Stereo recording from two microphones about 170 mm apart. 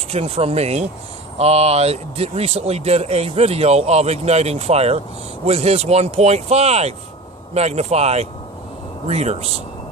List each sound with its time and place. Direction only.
0.1 s speech: 35° right (ahead or behind)